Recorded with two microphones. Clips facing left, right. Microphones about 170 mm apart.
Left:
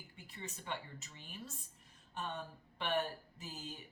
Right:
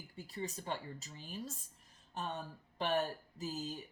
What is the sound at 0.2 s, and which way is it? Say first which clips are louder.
Speech: right 8 dB; 40° right (ahead or behind).